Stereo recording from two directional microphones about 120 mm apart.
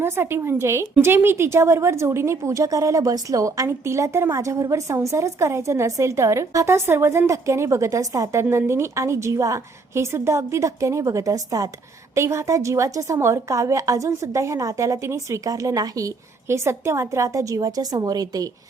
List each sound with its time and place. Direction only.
0.0 s a woman's voice: 20° right (ahead or behind)